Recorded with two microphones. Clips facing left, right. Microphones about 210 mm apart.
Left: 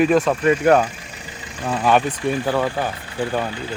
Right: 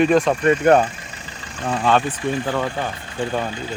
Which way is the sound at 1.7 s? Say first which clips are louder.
Left 1 dB; 10° left (ahead or behind).